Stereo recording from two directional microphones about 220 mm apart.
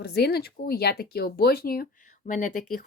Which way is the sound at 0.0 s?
45° left (ahead or behind).